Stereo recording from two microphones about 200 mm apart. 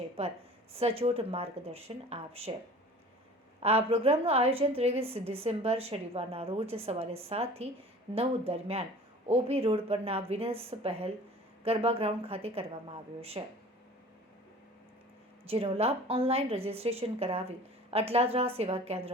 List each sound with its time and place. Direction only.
0.8 s a woman's voice: 30° right (ahead or behind)
3.6 s a woman's voice: 30° right (ahead or behind)
15.4 s a woman's voice: 30° right (ahead or behind)